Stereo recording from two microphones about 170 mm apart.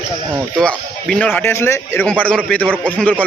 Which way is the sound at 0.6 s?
5° left (ahead or behind).